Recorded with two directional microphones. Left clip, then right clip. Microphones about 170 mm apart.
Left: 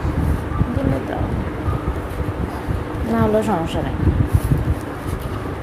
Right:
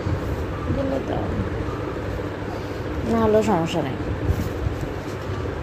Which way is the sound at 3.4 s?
10° right (ahead or behind).